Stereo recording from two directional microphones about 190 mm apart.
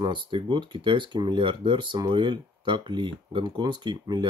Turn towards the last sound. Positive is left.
turn(degrees=-25)  # may be behind; listen again after turning